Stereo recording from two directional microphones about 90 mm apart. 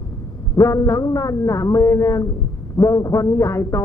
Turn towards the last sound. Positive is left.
turn(degrees=35)  # may be behind; listen again after turning